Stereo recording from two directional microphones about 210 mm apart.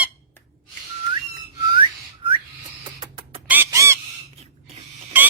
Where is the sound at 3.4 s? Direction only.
10° right (ahead or behind).